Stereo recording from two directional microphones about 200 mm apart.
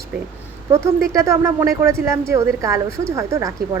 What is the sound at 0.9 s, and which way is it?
A woman's voice, 15° right (ahead or behind).